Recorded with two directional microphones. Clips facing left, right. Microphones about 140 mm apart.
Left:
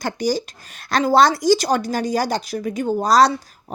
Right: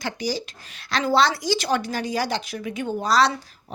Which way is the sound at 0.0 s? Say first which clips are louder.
Left 6 dB; 45° left (ahead or behind).